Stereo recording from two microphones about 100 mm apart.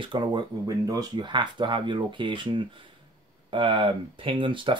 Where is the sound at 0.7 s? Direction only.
35° right (ahead or behind).